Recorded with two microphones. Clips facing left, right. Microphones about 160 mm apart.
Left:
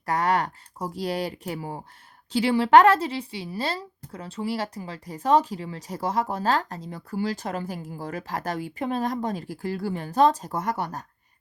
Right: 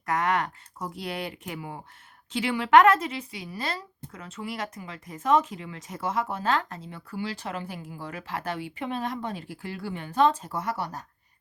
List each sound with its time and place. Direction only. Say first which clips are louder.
0.0 s speech: left 2 dB; 35° left (ahead or behind)